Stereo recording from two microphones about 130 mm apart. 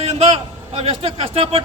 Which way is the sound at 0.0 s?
50° right (ahead or behind).